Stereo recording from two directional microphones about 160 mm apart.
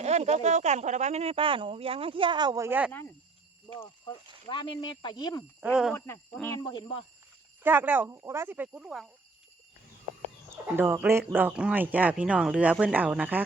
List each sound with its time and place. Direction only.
0.0 s speech: 45° right (ahead or behind); by 2.9 s 15° right (ahead or behind)
4.4 s speech: 30° left (ahead or behind)
5.5 s speech: 5° right (ahead or behind)
6.3 s speech: 10° left (ahead or behind)
6.6 s speech: 25° left (ahead or behind)
7.6 s speech: 10° right (ahead or behind)
10.5 s speech: 15° right (ahead or behind)